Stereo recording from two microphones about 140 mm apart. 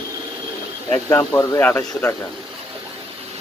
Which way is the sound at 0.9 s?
15° left (ahead or behind).